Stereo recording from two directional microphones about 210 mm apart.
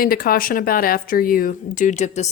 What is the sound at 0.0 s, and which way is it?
A woman's voice, 45° left (ahead or behind).